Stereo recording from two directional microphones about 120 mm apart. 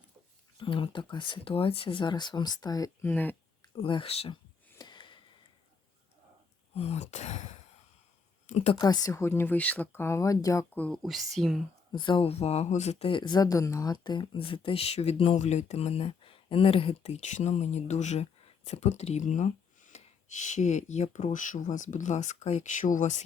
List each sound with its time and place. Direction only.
0.5 s speech: 45° left (ahead or behind)
3.0 s speech: 15° left (ahead or behind)
3.8 s speech: 45° left (ahead or behind)
4.8 s sniff: 40° left (ahead or behind)
6.7 s speech: 60° left (ahead or behind)
8.4 s speech: 60° left (ahead or behind)
8.8 s speech: 30° left (ahead or behind)
10.8 s speech: 10° left (ahead or behind)
11.0 s speech: centre (ahead or behind)
11.9 s speech: 40° left (ahead or behind); by 13.1 s 65° left (ahead or behind)
13.1 s speech: 40° left (ahead or behind); by 15.4 s 55° left (ahead or behind)
15.4 s speech: 70° left (ahead or behind); by 23.2 s 90° left